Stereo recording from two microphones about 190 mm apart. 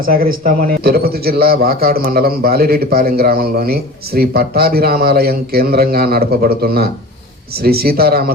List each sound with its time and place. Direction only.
0.0 s a man's voice: 50° right (ahead or behind)